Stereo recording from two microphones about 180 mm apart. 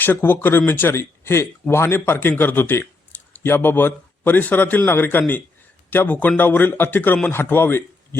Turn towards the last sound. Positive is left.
turn(degrees=10)  # may be behind; listen again after turning